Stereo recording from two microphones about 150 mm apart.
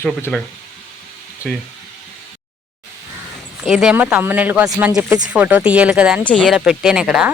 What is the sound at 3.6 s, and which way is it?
A woman's voice, 5° right (ahead or behind).